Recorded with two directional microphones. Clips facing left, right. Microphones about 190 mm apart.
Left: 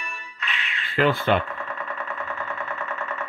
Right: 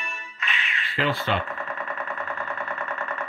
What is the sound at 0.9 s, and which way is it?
Speech, 50° left (ahead or behind).